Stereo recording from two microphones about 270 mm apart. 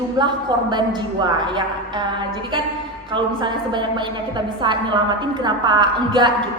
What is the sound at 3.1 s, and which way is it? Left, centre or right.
A woman's voice, centre.